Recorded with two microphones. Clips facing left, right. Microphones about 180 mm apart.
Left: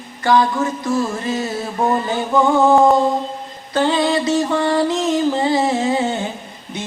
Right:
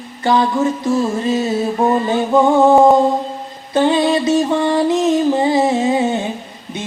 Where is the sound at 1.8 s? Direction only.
20° right (ahead or behind).